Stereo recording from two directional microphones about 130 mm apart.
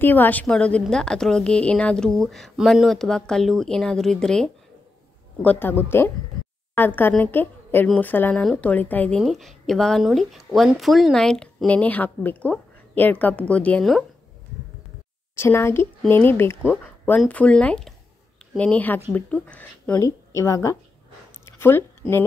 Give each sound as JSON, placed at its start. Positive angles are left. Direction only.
{"t": 0.0, "sound": "a woman's voice", "side_deg": 15}
{"t": 9.2, "sound": "a woman's voice", "side_deg": 0}
{"t": 15.3, "sound": "a woman's voice", "side_deg": 20}
{"t": 20.0, "sound": "a woman's voice", "side_deg": 25}
{"t": 21.5, "sound": "a sound", "side_deg": 20}